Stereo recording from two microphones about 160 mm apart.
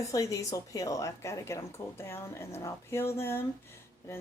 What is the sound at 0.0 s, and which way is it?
Speech, 20° left (ahead or behind).